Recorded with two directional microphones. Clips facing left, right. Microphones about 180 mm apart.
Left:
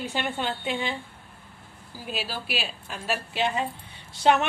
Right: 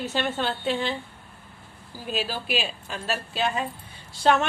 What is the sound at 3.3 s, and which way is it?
A woman's voice, 25° left (ahead or behind).